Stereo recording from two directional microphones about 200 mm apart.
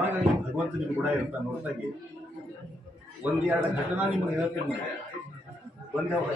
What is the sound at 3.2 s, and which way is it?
Speech, 10° right (ahead or behind).